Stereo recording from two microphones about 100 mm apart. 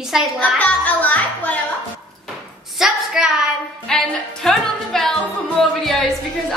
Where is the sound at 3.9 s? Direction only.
5° left (ahead or behind).